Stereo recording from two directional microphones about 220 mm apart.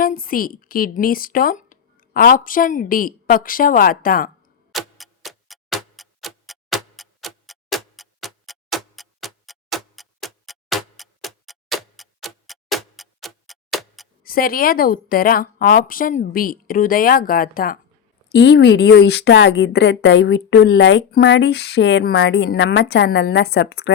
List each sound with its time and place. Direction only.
0.0 s speech: 40° left (ahead or behind)
4.7 s tick-tock: centre (ahead or behind)
14.3 s a woman's voice: 40° left (ahead or behind)